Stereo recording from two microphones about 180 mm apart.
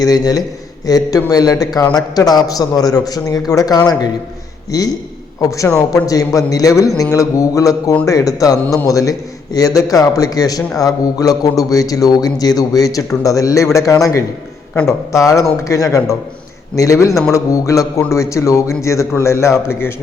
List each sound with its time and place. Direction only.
0.0 s a man's voice: 20° left (ahead or behind)
5.4 s a man's voice: 20° left (ahead or behind)